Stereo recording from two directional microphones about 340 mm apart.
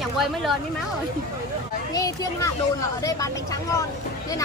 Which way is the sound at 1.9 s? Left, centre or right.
Centre.